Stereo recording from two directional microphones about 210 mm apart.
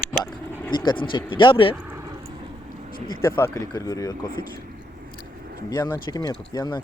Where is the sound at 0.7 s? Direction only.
20° left (ahead or behind).